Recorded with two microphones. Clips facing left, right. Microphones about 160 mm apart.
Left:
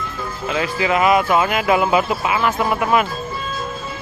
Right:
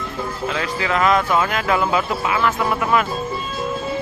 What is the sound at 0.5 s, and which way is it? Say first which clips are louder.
Speech: left 5 dB; 10° left (ahead or behind).